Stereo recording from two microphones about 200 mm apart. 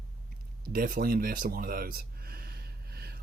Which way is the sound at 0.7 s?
45° right (ahead or behind).